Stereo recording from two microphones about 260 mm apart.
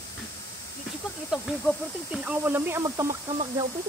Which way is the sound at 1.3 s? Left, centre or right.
Centre.